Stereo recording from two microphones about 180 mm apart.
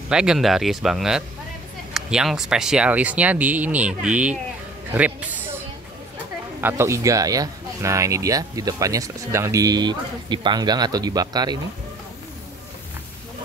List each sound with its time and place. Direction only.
0.1 s speech: 5° right (ahead or behind)
6.6 s speech: 15° right (ahead or behind)